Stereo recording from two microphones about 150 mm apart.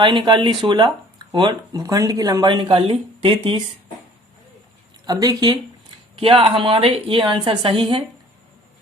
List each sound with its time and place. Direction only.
0.0 s speech: 30° right (ahead or behind)
5.0 s speech: 25° right (ahead or behind)
6.1 s speech: 35° right (ahead or behind)